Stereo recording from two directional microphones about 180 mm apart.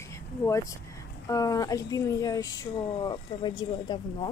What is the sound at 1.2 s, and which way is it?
Speech, 20° left (ahead or behind).